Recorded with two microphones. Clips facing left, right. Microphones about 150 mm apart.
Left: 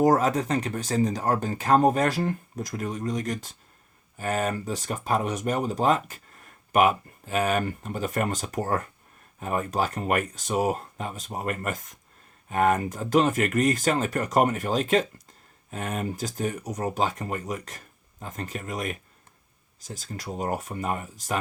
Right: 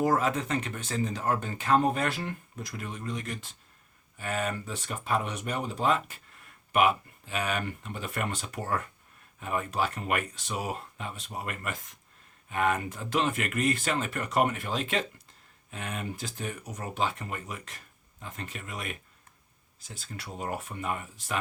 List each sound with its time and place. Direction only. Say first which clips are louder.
0.0 s speech: left 5 dB; 40° left (ahead or behind)